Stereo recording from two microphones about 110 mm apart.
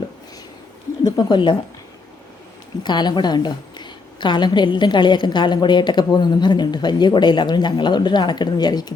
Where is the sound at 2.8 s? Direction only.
40° left (ahead or behind).